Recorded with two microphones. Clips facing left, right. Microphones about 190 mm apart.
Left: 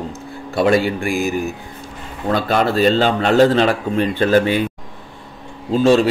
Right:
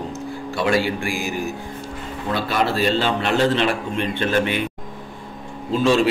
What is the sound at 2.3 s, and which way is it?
A man's voice, 45° left (ahead or behind).